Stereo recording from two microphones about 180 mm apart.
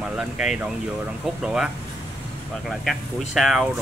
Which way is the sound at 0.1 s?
5° right (ahead or behind).